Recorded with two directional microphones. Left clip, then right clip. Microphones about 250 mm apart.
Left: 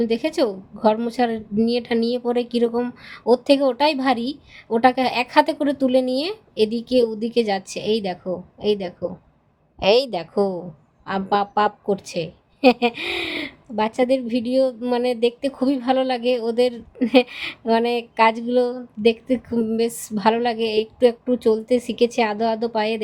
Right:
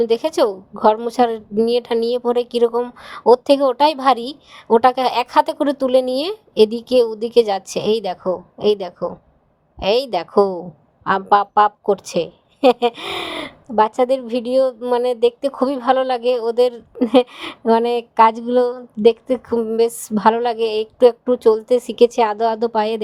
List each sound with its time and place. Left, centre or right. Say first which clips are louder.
0.0 s a woman's voice: right 5 dB; right
9.8 s a woman's voice: even; centre
10.2 s a woman's voice: right 6 dB; right